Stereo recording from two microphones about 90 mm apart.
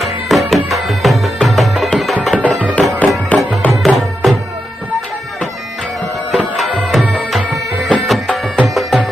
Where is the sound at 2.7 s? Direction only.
15° left (ahead or behind).